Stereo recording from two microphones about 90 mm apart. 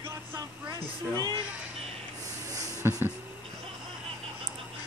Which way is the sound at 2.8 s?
30° right (ahead or behind).